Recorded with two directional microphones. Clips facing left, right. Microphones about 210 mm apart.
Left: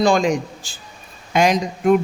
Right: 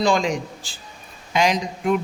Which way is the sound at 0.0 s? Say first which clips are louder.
Left 4 dB; 50° left (ahead or behind).